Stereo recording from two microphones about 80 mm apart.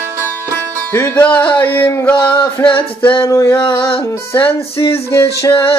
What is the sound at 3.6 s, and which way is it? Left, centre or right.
Music, left.